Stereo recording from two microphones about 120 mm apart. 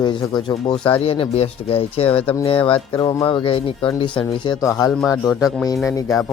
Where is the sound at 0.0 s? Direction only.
40° left (ahead or behind).